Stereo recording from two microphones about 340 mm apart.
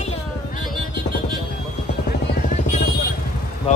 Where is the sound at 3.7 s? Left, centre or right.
Centre.